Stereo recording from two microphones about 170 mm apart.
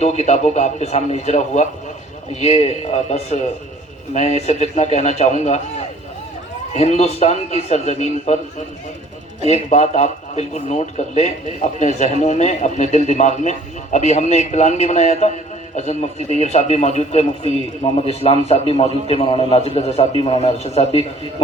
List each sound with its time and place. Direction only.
0.0 s a man's voice: 40° left (ahead or behind)
6.7 s a man's voice: 40° left (ahead or behind)
9.5 s a man's voice: 40° left (ahead or behind)